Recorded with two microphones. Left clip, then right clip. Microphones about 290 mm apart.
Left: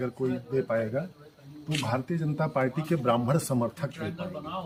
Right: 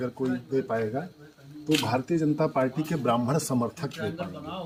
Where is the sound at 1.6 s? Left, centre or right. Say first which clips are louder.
Right 5 dB; centre.